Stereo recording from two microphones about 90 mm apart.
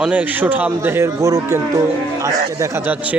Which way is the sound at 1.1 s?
40° right (ahead or behind).